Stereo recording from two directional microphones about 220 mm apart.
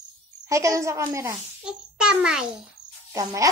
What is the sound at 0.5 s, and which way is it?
A woman's voice, 15° right (ahead or behind).